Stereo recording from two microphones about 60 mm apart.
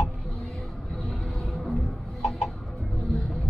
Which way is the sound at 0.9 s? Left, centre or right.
Centre.